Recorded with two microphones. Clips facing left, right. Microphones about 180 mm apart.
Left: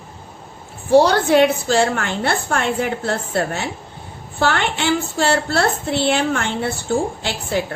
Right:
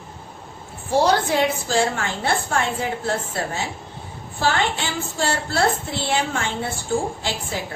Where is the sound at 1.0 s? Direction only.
65° left (ahead or behind).